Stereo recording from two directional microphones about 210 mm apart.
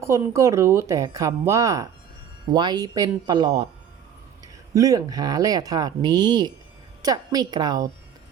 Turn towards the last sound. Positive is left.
turn(degrees=-20)  # may be behind; listen again after turning